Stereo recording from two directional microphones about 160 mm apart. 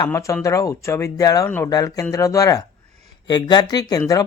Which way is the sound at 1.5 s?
10° left (ahead or behind).